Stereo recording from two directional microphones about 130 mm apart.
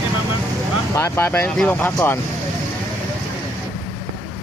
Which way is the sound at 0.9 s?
20° left (ahead or behind).